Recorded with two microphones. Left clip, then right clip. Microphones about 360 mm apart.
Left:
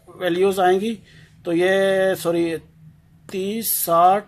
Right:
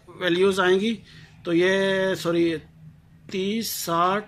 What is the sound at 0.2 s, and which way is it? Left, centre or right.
Speech, centre.